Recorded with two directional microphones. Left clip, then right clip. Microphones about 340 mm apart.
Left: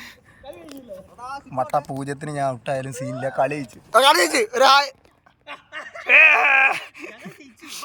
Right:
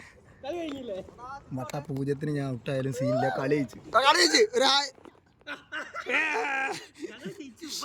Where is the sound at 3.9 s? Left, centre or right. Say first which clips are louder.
Left 6 dB; centre.